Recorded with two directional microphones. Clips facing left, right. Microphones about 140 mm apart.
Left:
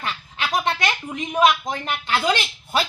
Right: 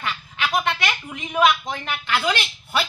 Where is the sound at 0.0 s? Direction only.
35° left (ahead or behind).